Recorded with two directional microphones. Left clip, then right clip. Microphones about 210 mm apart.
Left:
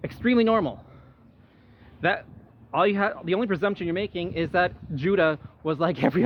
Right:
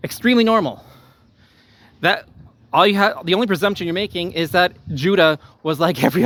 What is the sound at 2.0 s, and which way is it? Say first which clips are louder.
Speech: right 7 dB; 55° right (ahead or behind).